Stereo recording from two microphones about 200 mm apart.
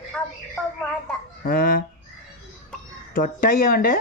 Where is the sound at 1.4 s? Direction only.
45° left (ahead or behind).